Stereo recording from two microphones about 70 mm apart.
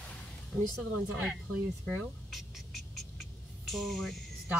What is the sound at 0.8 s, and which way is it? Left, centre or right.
Speech, centre.